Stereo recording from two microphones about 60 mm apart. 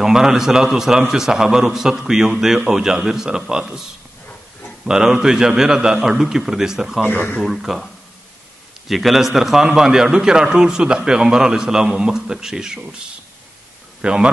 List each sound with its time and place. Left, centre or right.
0.0 s a man's voice: centre
4.8 s a man's voice: centre
7.1 s speech: left
7.4 s a man's voice: centre
14.0 s a man's voice: centre